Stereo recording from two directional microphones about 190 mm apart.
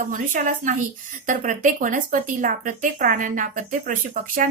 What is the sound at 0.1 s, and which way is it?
A woman's voice, 40° right (ahead or behind).